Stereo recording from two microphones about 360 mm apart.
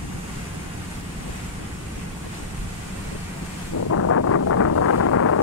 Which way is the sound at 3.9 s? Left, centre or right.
Left.